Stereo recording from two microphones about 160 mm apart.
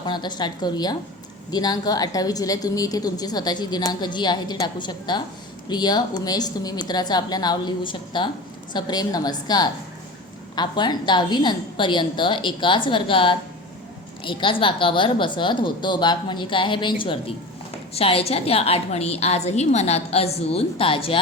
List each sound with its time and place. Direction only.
0.0 s a woman's voice: 25° left (ahead or behind)